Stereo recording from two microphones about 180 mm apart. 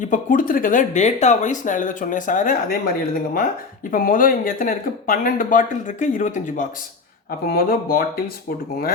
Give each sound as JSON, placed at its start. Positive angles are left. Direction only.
{"t": 0.1, "sound": "speech", "side_deg": 50}
{"t": 3.9, "sound": "speech", "side_deg": 50}
{"t": 7.3, "sound": "speech", "side_deg": 55}